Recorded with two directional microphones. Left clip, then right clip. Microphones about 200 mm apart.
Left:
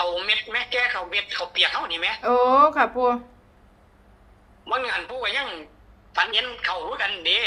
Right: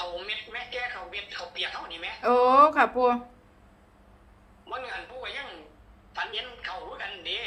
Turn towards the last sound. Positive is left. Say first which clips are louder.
# left 11 dB
turn(degrees=60)  # may be behind; listen again after turning